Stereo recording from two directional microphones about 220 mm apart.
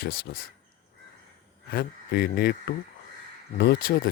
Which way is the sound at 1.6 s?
45° left (ahead or behind).